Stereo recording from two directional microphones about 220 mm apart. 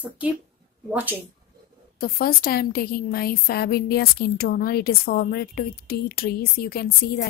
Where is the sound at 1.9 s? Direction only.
40° left (ahead or behind).